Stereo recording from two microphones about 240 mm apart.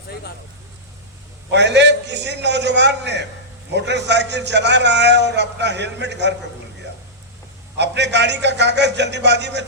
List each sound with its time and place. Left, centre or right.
1.5 s a sound: right
3.8 s a man's voice: right
7.8 s a man's voice: right